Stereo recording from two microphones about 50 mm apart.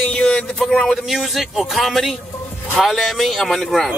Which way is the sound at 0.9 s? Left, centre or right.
Centre.